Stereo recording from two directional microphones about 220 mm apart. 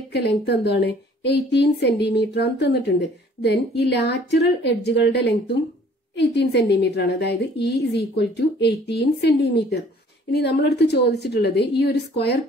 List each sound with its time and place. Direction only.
0.1 s a woman's voice: 50° left (ahead or behind)